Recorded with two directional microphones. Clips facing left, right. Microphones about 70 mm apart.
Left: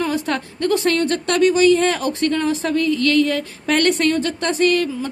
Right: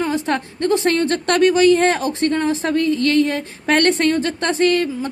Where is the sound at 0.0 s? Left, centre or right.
Right.